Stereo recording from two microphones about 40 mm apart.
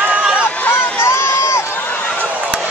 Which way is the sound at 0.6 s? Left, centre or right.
Left.